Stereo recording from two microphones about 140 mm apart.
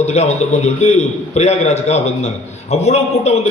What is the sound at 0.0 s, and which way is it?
A man's voice, 50° left (ahead or behind).